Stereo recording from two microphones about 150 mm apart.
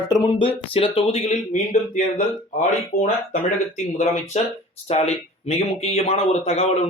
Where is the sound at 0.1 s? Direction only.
30° left (ahead or behind).